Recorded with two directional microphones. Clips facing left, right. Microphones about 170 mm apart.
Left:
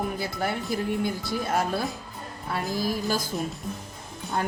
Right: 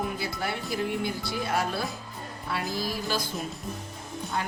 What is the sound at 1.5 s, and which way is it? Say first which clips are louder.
Speech: left 3 dB; 45° left (ahead or behind).